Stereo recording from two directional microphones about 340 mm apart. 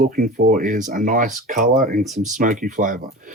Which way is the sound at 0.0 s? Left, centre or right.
Right.